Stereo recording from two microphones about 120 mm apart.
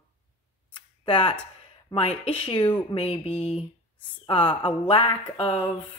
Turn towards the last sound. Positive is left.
turn(degrees=50)  # may be behind; listen again after turning